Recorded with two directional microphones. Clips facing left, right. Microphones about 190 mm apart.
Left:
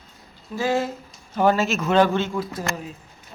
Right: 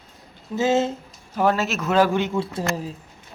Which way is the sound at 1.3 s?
Centre (ahead or behind).